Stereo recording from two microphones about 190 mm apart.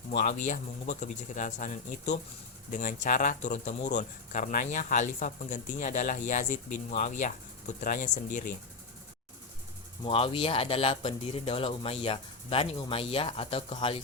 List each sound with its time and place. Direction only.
0.1 s speech: 40° left (ahead or behind)
10.1 s speech: 30° left (ahead or behind)